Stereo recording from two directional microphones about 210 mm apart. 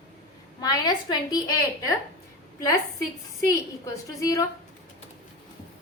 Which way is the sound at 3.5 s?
15° left (ahead or behind).